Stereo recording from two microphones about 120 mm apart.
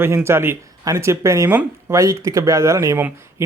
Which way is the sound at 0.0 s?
20° right (ahead or behind).